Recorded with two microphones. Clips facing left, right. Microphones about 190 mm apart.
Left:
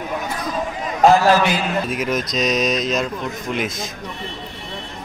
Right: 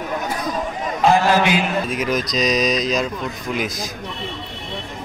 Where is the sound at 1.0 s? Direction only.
45° left (ahead or behind).